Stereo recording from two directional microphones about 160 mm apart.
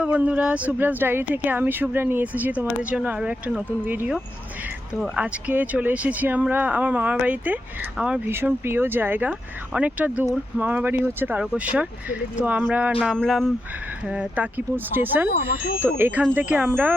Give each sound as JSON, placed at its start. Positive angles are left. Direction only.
{"t": 0.0, "sound": "speech", "side_deg": -10}
{"t": 15.3, "sound": "speech", "side_deg": 75}
{"t": 15.8, "sound": "speech", "side_deg": -15}